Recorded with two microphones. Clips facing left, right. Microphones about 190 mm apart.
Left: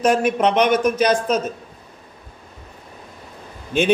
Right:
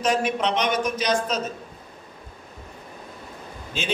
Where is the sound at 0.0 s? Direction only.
55° left (ahead or behind).